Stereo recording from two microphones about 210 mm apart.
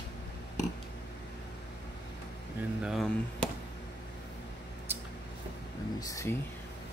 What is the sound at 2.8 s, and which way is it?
Chop, centre (ahead or behind).